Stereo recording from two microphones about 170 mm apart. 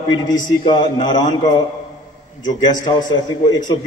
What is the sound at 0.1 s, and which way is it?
A man's voice, 25° left (ahead or behind).